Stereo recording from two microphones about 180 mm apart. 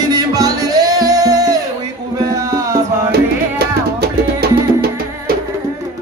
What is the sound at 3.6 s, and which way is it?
Music, 60° right (ahead or behind).